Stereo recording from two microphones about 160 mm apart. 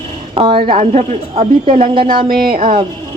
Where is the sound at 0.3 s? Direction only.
30° right (ahead or behind).